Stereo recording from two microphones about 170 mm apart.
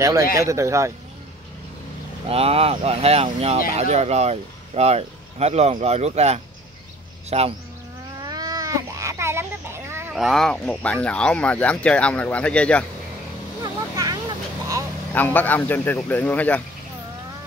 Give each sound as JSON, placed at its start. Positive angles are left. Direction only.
{"t": 0.0, "sound": "speech", "side_deg": -20}
{"t": 2.2, "sound": "speech", "side_deg": -35}
{"t": 8.2, "sound": "baby cry", "side_deg": -20}
{"t": 10.1, "sound": "speech", "side_deg": 0}
{"t": 13.6, "sound": "vehicle", "side_deg": -20}
{"t": 15.1, "sound": "speech", "side_deg": 10}